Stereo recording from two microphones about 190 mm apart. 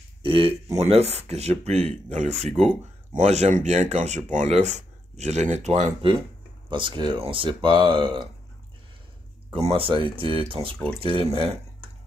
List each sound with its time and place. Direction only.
0.2 s speech: 30° right (ahead or behind)
9.5 s speech: 30° right (ahead or behind)